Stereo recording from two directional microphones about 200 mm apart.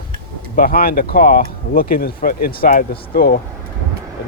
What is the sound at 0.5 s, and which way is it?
Speech, 45° left (ahead or behind).